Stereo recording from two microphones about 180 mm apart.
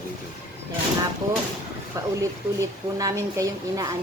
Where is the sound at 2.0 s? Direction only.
20° right (ahead or behind).